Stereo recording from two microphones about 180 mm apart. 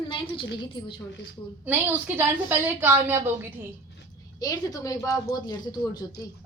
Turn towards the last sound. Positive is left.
turn(degrees=20)  # may be behind; listen again after turning